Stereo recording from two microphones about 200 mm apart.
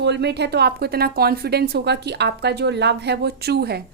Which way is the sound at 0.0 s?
55° right (ahead or behind).